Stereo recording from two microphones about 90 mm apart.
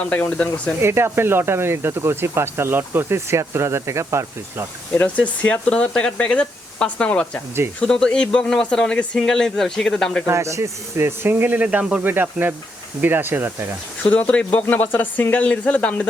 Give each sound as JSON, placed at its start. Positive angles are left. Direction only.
{"t": 0.0, "sound": "speech", "side_deg": 15}
{"t": 0.8, "sound": "speech", "side_deg": -25}
{"t": 4.9, "sound": "speech", "side_deg": 15}
{"t": 10.2, "sound": "speech", "side_deg": -35}
{"t": 14.0, "sound": "speech", "side_deg": 20}